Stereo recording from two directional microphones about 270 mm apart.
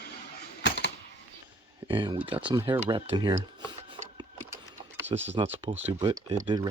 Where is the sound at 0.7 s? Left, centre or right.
Left.